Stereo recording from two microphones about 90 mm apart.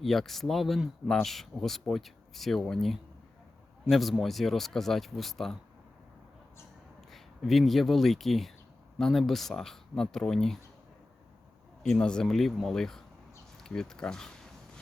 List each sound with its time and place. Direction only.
0.0 s speech: centre (ahead or behind)
7.1 s speech: centre (ahead or behind)
11.8 s speech: 10° left (ahead or behind)